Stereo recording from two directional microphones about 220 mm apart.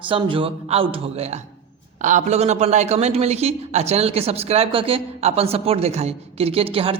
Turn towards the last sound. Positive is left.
turn(degrees=-25)  # may be behind; listen again after turning